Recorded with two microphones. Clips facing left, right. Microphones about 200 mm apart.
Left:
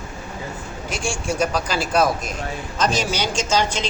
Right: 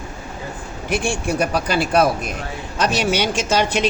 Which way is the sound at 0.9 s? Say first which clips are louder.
Right 4 dB; 60° right (ahead or behind).